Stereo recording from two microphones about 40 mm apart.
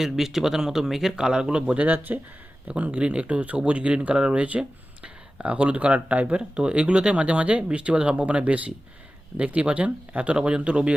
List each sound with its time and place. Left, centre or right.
0.0 s speech: centre; by 1.8 s right
1.8 s speech: right
2.6 s speech: right